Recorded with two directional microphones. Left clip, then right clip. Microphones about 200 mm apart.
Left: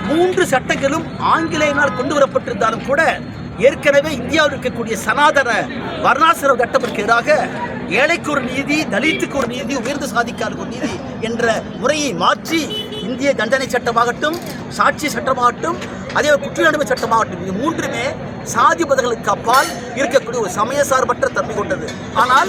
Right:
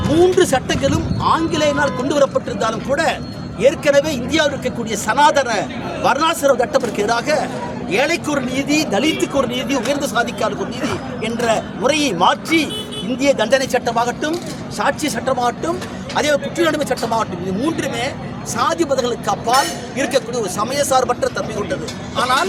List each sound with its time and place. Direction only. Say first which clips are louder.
0.3 s speech: even; centre (ahead or behind)